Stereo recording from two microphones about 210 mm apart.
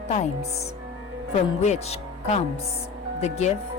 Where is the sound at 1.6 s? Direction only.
30° left (ahead or behind).